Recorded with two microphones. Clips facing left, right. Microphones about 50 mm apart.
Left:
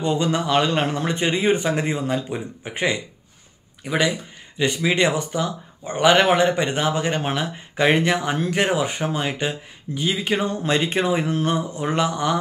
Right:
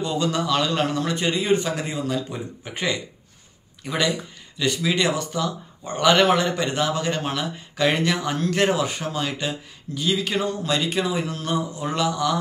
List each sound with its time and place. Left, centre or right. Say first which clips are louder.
0.0 s speech: left 2 dB; left